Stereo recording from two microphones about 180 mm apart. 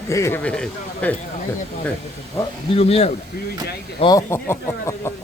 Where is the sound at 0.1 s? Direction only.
15° left (ahead or behind).